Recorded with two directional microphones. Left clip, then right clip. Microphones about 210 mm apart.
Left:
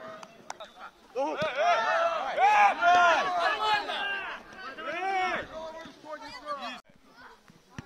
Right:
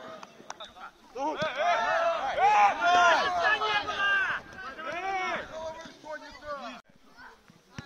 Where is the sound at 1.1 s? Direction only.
55° left (ahead or behind); by 2.8 s 35° left (ahead or behind).